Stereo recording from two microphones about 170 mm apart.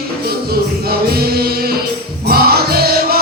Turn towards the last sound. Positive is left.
turn(degrees=-65)  # may be behind; listen again after turning